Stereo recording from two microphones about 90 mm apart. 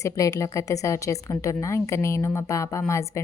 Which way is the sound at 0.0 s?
35° left (ahead or behind).